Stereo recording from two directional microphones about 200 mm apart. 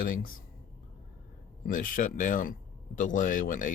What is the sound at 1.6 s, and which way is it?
A man's voice, 45° left (ahead or behind).